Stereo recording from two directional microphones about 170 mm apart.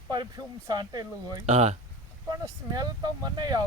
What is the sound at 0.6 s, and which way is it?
Speech, 25° right (ahead or behind).